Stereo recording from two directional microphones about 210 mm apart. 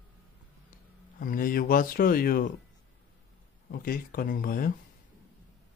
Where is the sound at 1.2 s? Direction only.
40° left (ahead or behind).